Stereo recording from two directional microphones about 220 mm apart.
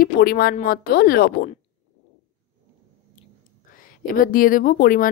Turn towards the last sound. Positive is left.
turn(degrees=40)  # may be behind; listen again after turning